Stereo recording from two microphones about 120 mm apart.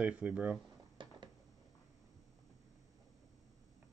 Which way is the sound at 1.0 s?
40° right (ahead or behind).